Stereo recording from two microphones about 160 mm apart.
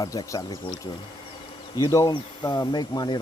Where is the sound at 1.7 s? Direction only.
20° left (ahead or behind).